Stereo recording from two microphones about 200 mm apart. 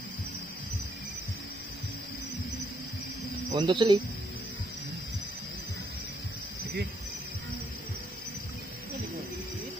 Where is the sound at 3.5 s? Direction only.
25° right (ahead or behind).